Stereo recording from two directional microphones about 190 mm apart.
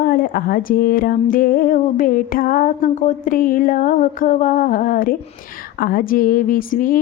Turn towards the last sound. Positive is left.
turn(degrees=45)  # may be behind; listen again after turning